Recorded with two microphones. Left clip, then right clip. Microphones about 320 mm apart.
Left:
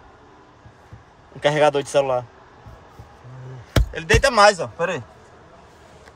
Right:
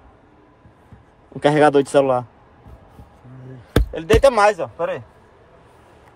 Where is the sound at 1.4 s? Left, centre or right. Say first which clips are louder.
Right 3 dB; right.